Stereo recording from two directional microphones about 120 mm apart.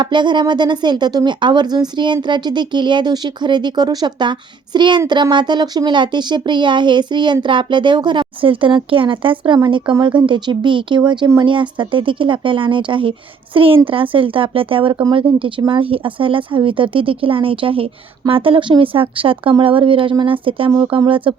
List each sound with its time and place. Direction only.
0.0 s speech: 40° right (ahead or behind)